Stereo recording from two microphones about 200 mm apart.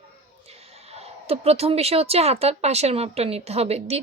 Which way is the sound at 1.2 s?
30° right (ahead or behind).